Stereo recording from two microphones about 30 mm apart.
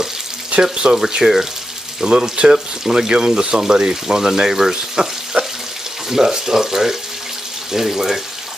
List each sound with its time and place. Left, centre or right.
0.6 s speech: right
0.9 s speech: centre
2.0 s speech: right
5.0 s speech: right
5.3 s water tap: right
6.0 s speech: centre